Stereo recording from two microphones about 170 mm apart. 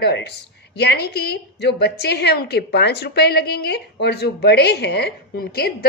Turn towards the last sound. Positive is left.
turn(degrees=65)  # may be behind; listen again after turning